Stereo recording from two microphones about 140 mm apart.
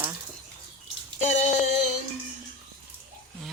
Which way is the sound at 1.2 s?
60° left (ahead or behind).